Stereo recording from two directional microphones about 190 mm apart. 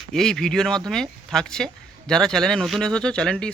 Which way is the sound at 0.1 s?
Centre (ahead or behind).